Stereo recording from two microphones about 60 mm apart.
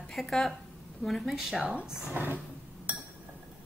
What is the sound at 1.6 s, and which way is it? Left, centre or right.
Speech, centre.